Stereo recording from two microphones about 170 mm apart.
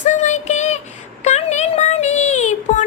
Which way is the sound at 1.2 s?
40° left (ahead or behind).